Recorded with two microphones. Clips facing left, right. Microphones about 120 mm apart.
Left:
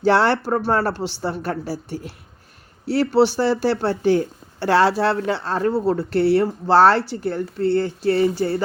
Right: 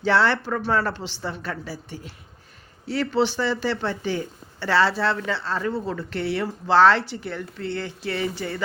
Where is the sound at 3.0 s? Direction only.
40° left (ahead or behind).